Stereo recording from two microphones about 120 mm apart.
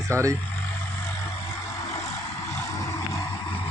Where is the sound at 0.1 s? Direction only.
25° right (ahead or behind).